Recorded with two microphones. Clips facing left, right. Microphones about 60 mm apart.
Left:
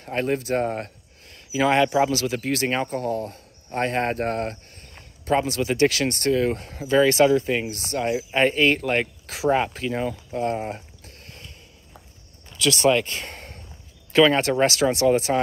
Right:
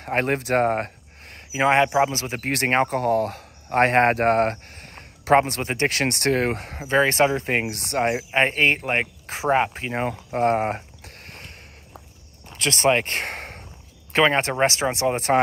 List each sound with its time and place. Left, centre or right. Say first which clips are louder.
0.0 s speech: right 2 dB; right
6.8 s speech: left 2 dB; right
7.6 s speech: right 3 dB; right
8.3 s speech: left 3 dB; right
11.0 s a sound: right 3 dB; right
12.4 s speech: left 1 dB; right
14.1 s speech: left 2 dB; right
15.1 s speech: right 2 dB; right